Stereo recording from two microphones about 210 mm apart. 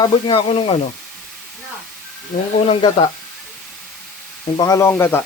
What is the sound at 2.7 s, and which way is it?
Speech, 25° left (ahead or behind).